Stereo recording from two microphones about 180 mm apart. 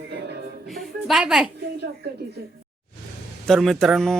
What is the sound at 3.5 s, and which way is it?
Speech, centre (ahead or behind).